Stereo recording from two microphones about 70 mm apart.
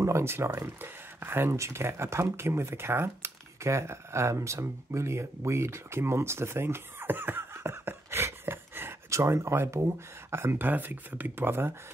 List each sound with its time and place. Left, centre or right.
0.0 s speech: right
9.1 s speech: right